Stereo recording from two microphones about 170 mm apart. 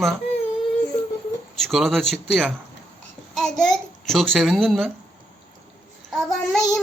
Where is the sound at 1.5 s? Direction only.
Centre (ahead or behind).